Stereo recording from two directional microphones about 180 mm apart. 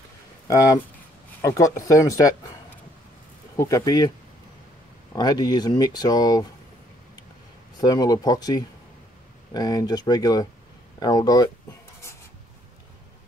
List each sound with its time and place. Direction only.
0.5 s speech: 20° left (ahead or behind)
5.1 s speech: 20° left (ahead or behind)
7.8 s speech: 20° left (ahead or behind)